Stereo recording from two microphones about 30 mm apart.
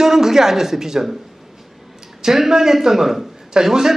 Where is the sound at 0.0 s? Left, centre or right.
Centre.